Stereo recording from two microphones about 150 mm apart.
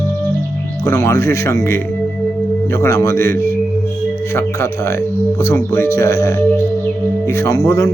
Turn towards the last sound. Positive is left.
turn(degrees=20)  # may be behind; listen again after turning